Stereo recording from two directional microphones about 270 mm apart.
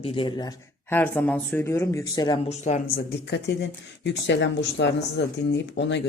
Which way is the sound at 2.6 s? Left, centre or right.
Left.